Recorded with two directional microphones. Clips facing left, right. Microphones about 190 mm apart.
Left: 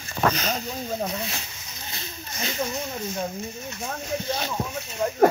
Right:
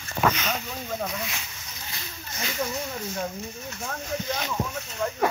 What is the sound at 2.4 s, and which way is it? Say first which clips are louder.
Speech: left 1 dB; 25° left (ahead or behind).